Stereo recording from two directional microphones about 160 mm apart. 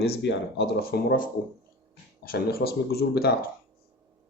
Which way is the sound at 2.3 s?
75° left (ahead or behind).